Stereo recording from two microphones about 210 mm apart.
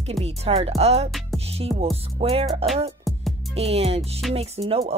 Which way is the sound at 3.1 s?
Centre (ahead or behind).